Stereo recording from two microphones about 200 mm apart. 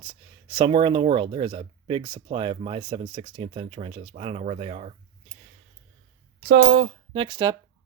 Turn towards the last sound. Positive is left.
turn(degrees=-20)  # may be behind; listen again after turning